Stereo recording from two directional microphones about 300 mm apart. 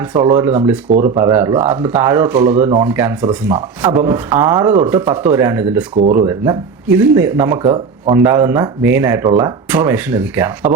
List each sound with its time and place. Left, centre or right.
0.2 s speech: centre
6.0 s speech: right
6.2 s speech: centre